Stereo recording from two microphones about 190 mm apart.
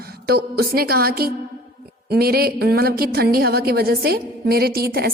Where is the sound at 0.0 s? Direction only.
55° right (ahead or behind).